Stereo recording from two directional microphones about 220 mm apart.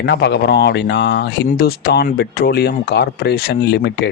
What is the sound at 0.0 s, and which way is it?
Speech, 50° left (ahead or behind).